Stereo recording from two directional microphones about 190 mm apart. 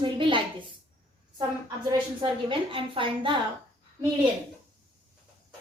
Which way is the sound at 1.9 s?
25° right (ahead or behind).